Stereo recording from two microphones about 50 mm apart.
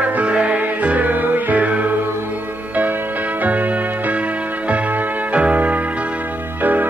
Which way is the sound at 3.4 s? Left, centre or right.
Right.